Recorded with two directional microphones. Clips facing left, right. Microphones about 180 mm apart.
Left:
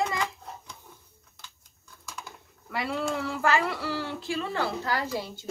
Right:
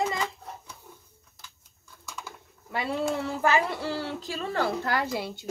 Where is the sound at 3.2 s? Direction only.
20° right (ahead or behind).